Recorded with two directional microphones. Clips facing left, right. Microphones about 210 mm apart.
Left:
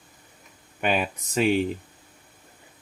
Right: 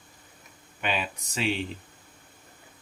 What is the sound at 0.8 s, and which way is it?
Speech, 45° left (ahead or behind).